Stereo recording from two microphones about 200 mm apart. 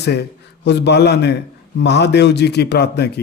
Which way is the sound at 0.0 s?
55° left (ahead or behind).